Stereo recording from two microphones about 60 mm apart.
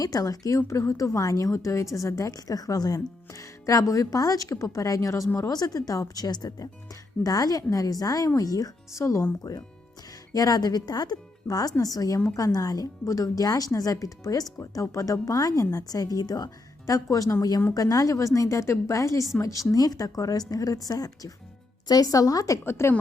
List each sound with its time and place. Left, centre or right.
0.0 s a woman's voice: left
5.4 s speech: left
9.5 s speech: left
16.8 s a woman's voice: left
19.7 s speech: left
22.6 s a woman's voice: left